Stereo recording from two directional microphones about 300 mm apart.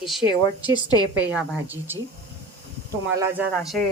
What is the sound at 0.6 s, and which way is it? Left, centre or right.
Speech, centre.